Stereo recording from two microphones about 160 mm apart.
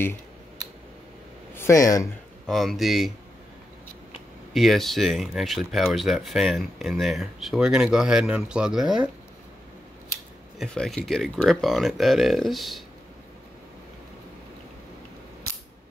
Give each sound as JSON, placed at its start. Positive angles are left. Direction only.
{"t": 1.5, "sound": "speech", "side_deg": 15}
{"t": 2.4, "sound": "speech", "side_deg": 0}
{"t": 4.6, "sound": "speech", "side_deg": 0}
{"t": 10.6, "sound": "speech", "side_deg": 0}